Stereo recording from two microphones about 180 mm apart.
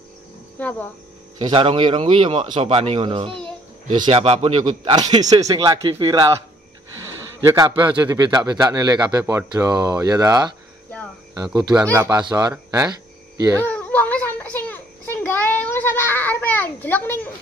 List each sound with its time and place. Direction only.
0.6 s speech: 10° left (ahead or behind)
1.4 s a man's voice: 30° right (ahead or behind)
9.2 s a man's voice: 10° right (ahead or behind)
9.5 s a man's voice: 20° right (ahead or behind)
13.6 s a sound: 10° left (ahead or behind)